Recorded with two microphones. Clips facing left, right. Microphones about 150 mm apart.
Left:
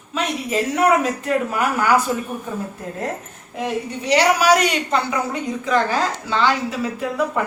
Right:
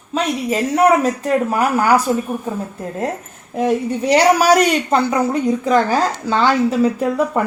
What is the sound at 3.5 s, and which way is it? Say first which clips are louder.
Speech: right 7 dB; 45° right (ahead or behind).